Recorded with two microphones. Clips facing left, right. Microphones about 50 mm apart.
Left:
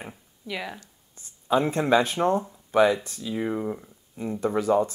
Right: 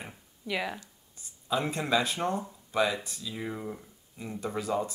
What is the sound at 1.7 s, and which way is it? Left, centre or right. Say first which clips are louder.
Speech: left 7 dB; left.